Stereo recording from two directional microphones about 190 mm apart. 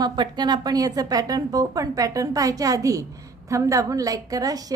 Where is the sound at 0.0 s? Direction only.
20° right (ahead or behind).